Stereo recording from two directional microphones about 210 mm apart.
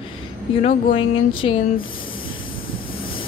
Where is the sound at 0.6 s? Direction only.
40° left (ahead or behind).